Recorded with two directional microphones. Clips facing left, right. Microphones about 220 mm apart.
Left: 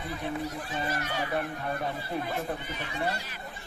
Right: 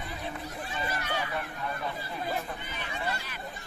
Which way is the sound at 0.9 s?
40° left (ahead or behind).